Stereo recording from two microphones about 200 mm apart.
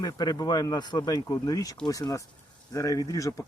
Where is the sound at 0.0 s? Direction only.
20° left (ahead or behind).